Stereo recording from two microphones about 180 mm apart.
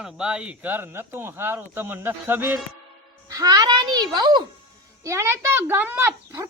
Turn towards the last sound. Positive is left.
turn(degrees=-15)  # may be behind; listen again after turning